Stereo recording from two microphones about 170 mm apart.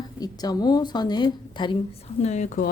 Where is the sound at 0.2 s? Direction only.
25° left (ahead or behind).